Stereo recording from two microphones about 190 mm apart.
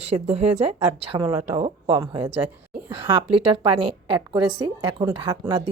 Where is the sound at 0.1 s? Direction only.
25° right (ahead or behind).